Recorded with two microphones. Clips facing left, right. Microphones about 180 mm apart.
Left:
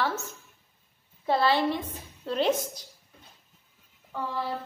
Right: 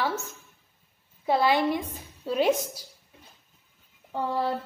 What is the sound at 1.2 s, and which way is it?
A woman's voice, 10° right (ahead or behind).